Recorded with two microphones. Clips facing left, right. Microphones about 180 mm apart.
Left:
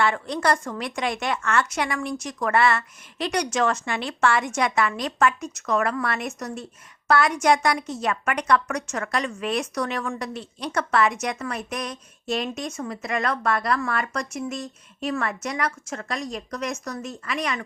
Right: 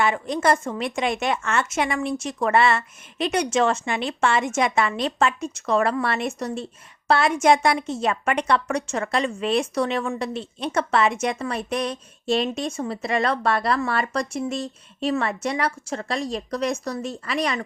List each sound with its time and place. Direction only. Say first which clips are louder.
0.0 s a woman's voice: right 2 dB; 20° right (ahead or behind)